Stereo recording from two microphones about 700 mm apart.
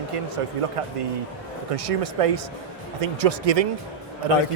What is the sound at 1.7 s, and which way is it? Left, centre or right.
A man's voice, right.